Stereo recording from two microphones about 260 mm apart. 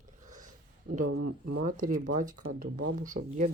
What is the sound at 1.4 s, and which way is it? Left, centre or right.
Speech, right.